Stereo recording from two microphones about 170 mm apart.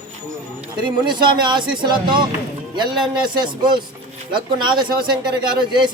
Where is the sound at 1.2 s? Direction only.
25° right (ahead or behind).